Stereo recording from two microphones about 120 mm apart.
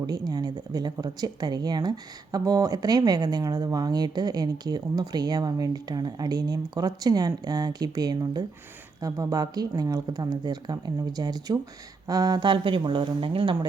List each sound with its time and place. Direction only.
0.0 s speech: 35° right (ahead or behind)